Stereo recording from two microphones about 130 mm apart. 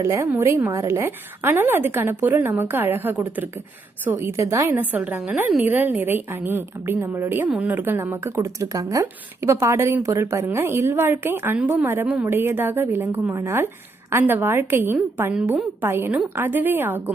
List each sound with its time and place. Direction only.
0.0 s a woman's voice: 20° right (ahead or behind)